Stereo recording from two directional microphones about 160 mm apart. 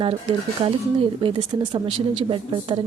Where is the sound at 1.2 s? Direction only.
30° right (ahead or behind).